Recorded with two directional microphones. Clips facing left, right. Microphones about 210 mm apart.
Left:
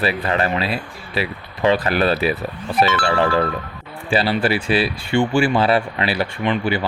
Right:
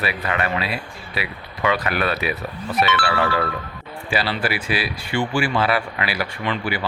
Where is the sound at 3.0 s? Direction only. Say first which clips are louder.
Left 4 dB; 40° left (ahead or behind).